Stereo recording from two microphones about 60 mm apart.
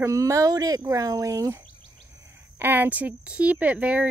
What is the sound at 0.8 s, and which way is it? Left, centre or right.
Speech, right.